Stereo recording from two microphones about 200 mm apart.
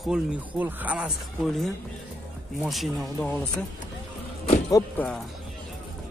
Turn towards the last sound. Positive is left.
turn(degrees=5)  # may be behind; listen again after turning